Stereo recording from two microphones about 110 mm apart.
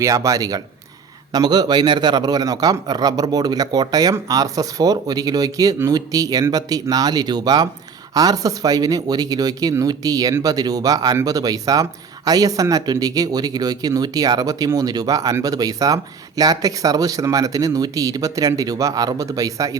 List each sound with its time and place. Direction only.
0.0 s speech: 30° right (ahead or behind)